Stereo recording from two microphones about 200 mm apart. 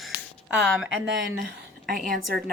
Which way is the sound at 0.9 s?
60° right (ahead or behind).